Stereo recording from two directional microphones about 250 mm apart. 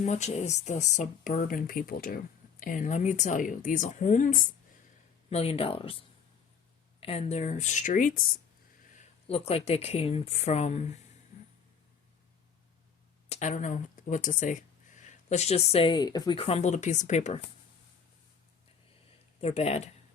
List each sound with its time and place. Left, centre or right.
0.0 s speech: left
7.0 s speech: left
13.2 s speech: left
19.4 s speech: left